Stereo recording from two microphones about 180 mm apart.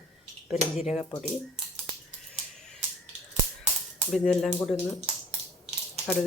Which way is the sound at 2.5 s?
5° left (ahead or behind).